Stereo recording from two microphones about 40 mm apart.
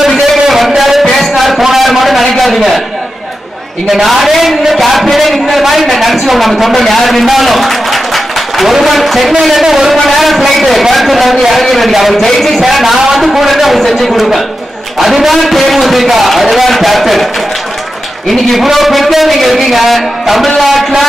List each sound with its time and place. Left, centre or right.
0.0 s a sound: centre
3.9 s a man's voice: centre
18.3 s a man's voice: centre